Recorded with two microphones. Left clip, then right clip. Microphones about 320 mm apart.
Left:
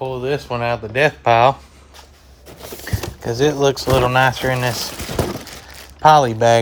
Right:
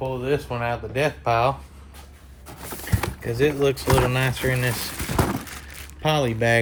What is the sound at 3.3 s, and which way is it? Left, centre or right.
Speech, centre.